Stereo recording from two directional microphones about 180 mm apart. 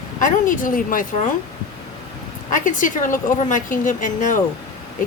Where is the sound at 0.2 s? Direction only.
45° left (ahead or behind).